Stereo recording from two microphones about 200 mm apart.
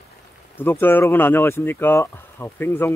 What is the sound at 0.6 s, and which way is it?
Speech, 10° left (ahead or behind).